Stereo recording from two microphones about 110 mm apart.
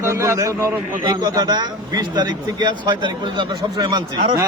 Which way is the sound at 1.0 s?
40° right (ahead or behind).